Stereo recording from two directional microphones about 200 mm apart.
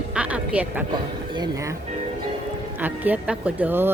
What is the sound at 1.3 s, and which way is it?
Speech, 20° right (ahead or behind).